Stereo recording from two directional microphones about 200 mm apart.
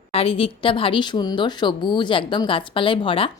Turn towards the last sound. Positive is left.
turn(degrees=25)  # may be behind; listen again after turning